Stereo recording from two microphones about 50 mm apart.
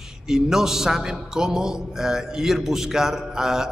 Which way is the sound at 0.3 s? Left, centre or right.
Centre.